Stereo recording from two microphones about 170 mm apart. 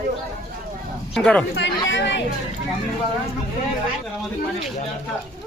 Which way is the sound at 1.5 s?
90° left.